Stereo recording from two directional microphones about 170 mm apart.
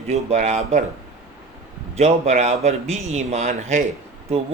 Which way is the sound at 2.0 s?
40° right (ahead or behind).